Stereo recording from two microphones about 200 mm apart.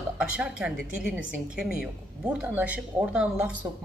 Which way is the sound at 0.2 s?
5° right (ahead or behind).